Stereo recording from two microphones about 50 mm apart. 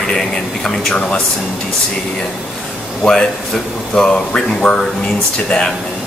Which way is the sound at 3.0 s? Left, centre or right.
Centre.